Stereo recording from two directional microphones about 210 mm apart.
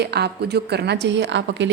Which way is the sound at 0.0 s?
50° right (ahead or behind).